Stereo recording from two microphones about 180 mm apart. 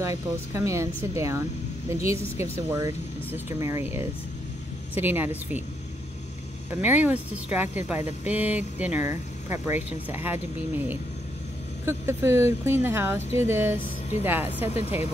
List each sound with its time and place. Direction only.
0.5 s speech: 15° right (ahead or behind)
6.7 s speech: 10° right (ahead or behind)
14.7 s speech: 35° left (ahead or behind)